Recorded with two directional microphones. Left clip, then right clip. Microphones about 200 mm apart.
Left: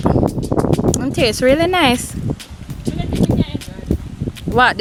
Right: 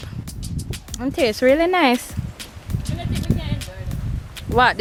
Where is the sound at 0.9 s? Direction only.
15° left (ahead or behind).